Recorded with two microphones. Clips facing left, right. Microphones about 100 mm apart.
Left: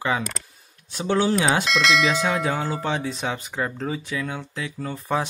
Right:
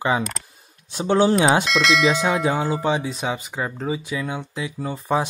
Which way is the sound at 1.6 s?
Centre (ahead or behind).